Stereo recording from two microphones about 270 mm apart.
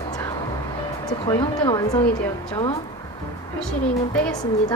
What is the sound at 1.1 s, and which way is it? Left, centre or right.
Speech, centre.